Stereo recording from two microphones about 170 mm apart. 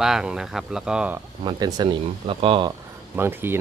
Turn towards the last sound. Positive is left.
turn(degrees=-15)  # may be behind; listen again after turning